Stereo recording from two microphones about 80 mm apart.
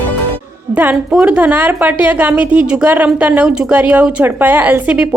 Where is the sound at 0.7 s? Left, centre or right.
Centre.